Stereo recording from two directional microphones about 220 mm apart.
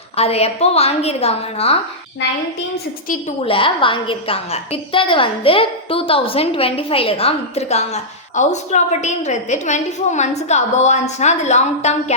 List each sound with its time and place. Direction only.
0.2 s a woman's voice: 25° left (ahead or behind)
3.1 s a woman's voice: 30° left (ahead or behind)